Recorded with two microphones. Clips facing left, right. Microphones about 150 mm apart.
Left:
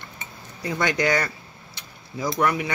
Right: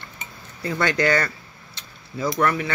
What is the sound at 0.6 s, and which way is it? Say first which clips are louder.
Speech: right 2 dB; 10° left (ahead or behind).